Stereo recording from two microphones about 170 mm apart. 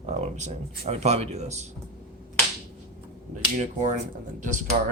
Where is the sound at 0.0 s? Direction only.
40° right (ahead or behind).